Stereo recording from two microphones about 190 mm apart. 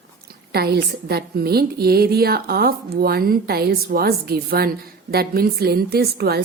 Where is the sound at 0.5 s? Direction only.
55° right (ahead or behind).